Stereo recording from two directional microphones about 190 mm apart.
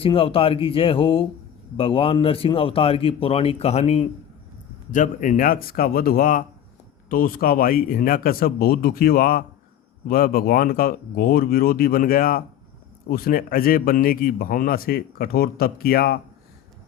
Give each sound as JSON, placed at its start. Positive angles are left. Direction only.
{"t": 0.0, "sound": "a man's voice", "side_deg": 30}